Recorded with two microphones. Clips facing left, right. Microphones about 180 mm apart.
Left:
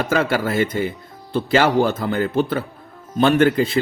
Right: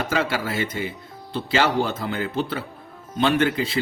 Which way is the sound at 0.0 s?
50° left (ahead or behind).